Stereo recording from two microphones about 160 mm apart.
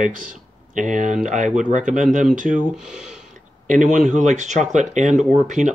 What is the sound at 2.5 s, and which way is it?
Speech, 5° right (ahead or behind).